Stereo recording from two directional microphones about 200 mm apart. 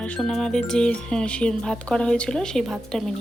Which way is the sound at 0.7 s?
5° left (ahead or behind).